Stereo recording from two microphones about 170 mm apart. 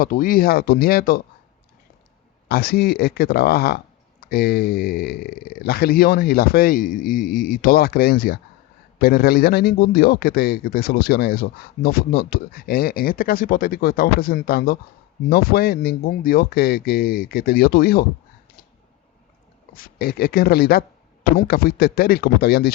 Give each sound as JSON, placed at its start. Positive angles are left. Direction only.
{"t": 0.0, "sound": "a man's voice", "side_deg": 55}
{"t": 2.5, "sound": "a man's voice", "side_deg": 60}
{"t": 19.7, "sound": "a man's voice", "side_deg": 60}